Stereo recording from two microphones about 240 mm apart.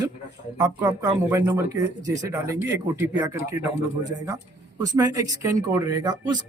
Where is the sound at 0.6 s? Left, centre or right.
Centre.